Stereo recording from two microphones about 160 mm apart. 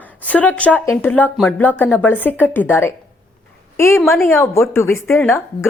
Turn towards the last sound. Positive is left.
turn(degrees=15)  # may be behind; listen again after turning